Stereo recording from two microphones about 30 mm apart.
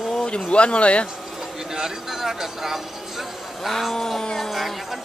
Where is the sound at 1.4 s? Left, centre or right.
Centre.